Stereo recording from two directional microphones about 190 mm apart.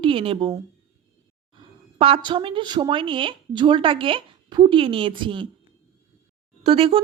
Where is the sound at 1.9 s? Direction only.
30° right (ahead or behind).